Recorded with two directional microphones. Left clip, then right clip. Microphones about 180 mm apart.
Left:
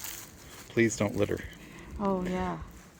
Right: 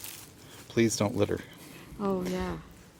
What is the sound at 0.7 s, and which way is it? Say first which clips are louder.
Speech: even; 30° right (ahead or behind).